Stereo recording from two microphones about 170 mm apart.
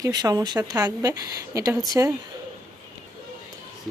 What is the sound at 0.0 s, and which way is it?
A woman's voice, 20° right (ahead or behind).